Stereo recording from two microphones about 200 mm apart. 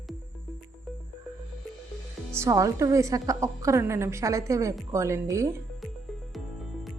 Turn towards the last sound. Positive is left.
turn(degrees=-15)  # may be behind; listen again after turning